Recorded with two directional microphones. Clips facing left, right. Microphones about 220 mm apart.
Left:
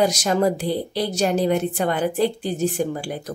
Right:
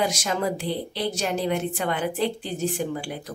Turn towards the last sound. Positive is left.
turn(degrees=40)  # may be behind; listen again after turning